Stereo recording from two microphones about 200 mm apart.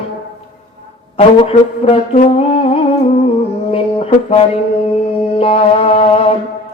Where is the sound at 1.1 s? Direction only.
30° left (ahead or behind).